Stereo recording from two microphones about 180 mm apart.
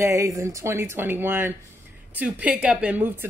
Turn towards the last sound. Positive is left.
turn(degrees=-10)  # may be behind; listen again after turning